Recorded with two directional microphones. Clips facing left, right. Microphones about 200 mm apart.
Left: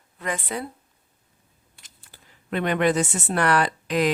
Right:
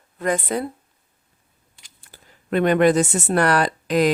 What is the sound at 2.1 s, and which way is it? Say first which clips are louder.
Speech: right 6 dB; 45° right (ahead or behind).